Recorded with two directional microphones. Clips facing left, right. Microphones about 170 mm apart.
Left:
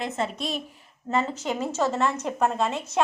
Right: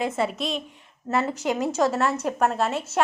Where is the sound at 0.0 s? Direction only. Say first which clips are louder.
Right 3 dB; 5° right (ahead or behind).